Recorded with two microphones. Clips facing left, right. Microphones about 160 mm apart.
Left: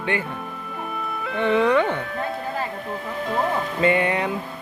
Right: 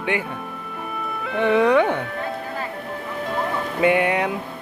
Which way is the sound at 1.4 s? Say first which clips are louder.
Right 2 dB; 10° right (ahead or behind).